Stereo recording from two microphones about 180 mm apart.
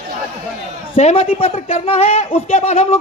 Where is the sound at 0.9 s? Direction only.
35° left (ahead or behind).